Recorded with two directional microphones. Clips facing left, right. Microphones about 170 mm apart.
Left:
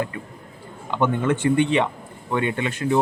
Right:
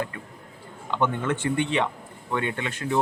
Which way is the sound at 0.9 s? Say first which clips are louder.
Left 4 dB; 15° left (ahead or behind).